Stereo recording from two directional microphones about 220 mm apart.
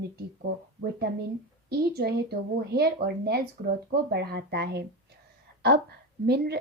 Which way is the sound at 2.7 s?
45° right (ahead or behind).